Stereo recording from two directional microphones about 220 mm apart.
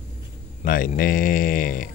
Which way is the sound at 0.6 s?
35° left (ahead or behind).